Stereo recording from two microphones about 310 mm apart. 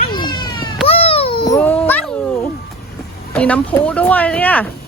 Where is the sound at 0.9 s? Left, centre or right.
Centre.